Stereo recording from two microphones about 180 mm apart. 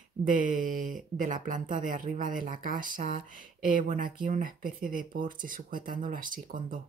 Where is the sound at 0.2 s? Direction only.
50° right (ahead or behind).